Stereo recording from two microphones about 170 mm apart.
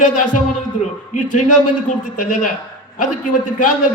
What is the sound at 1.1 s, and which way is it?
A man's voice, 50° left (ahead or behind).